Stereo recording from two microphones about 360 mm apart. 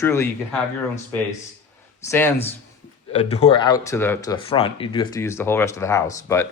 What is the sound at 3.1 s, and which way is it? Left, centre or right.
Speech, centre.